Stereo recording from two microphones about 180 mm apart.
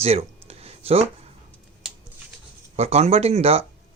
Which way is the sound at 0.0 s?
35° right (ahead or behind).